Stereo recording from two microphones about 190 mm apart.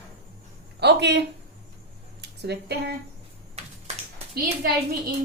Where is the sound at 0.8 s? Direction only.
60° right (ahead or behind).